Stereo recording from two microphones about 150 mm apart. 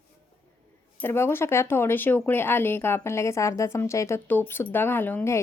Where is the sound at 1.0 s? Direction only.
15° left (ahead or behind).